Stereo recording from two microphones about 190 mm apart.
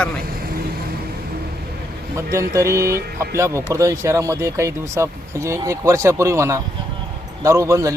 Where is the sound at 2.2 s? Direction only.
15° right (ahead or behind).